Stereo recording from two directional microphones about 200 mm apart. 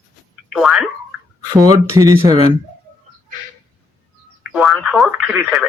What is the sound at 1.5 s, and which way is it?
Speech, 15° right (ahead or behind).